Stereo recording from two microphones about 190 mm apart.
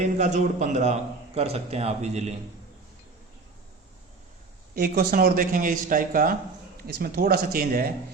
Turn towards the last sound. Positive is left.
turn(degrees=-50)  # may be behind; listen again after turning